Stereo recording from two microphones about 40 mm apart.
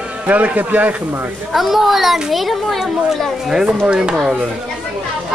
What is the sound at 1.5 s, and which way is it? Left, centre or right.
A woman's voice, centre.